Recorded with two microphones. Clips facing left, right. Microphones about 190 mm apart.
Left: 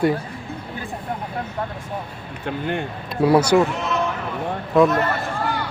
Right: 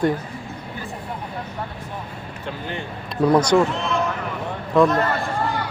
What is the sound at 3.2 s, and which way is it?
Speech, 10° left (ahead or behind).